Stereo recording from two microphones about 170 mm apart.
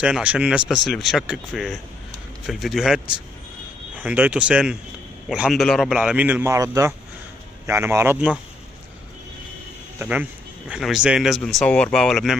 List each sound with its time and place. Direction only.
0.0 s a man's voice: 5° right (ahead or behind)
9.9 s speech: 10° right (ahead or behind)